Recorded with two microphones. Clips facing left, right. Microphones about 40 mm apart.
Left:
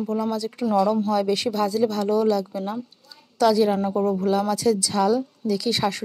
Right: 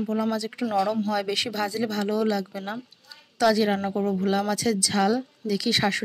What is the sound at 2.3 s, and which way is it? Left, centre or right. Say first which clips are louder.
Speech: left 4 dB; right.